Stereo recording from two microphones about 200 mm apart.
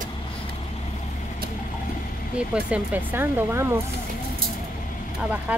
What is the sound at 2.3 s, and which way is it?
Speech, 5° right (ahead or behind).